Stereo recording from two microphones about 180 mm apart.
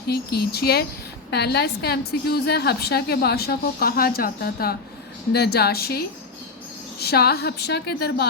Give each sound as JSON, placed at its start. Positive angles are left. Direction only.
{"t": 0.1, "sound": "a woman's voice", "side_deg": 60}